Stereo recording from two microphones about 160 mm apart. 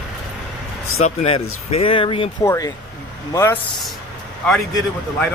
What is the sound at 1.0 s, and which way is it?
Speech, 40° left (ahead or behind).